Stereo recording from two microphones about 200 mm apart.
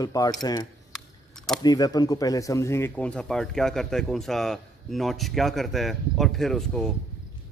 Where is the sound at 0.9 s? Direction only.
Centre (ahead or behind).